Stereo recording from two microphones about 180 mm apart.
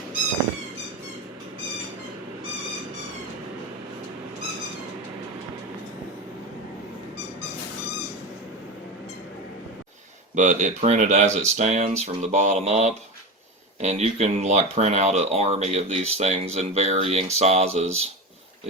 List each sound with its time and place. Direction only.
10.3 s speech: 45° right (ahead or behind)